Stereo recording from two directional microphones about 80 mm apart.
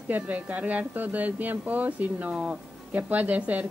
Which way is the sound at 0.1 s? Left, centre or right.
Centre.